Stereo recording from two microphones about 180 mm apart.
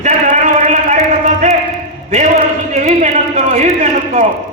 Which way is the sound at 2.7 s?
40° right (ahead or behind).